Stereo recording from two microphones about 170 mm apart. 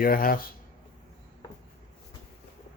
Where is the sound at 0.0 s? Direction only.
60° left (ahead or behind).